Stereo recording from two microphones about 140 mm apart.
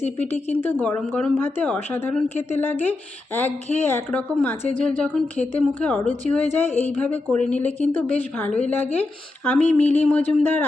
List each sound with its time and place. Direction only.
0.2 s a woman's voice: 15° left (ahead or behind)